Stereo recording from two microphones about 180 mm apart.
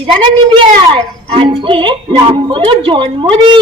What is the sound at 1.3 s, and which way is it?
Speech, 30° right (ahead or behind).